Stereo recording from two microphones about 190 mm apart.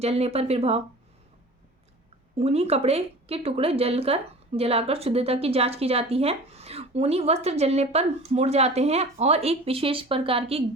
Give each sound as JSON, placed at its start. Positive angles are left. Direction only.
{"t": 0.0, "sound": "a woman's voice", "side_deg": -35}
{"t": 2.4, "sound": "a woman's voice", "side_deg": -35}